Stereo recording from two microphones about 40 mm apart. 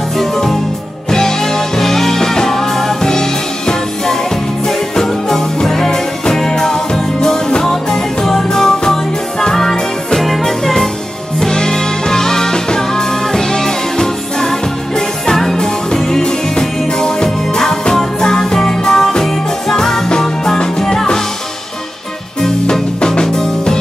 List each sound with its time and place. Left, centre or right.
0.2 s music: centre
10.2 s music: centre
22.4 s music: centre